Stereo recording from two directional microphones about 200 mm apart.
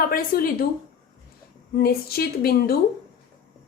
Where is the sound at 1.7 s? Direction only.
50° left (ahead or behind).